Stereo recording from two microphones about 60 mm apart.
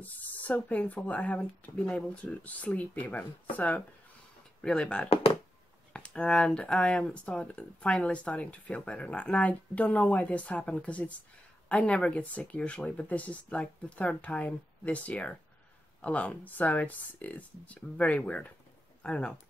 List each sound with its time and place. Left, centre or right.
0.0 s speech: left
4.6 s speech: centre